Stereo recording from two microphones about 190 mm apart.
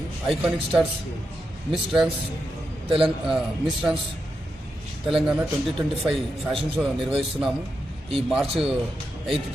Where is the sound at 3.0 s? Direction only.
Centre (ahead or behind).